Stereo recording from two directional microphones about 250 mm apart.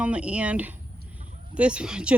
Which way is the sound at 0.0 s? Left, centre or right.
Centre.